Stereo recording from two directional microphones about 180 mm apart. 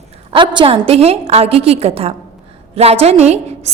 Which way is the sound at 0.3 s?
30° right (ahead or behind).